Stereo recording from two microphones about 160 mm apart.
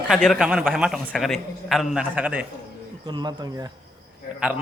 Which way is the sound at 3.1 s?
25° right (ahead or behind).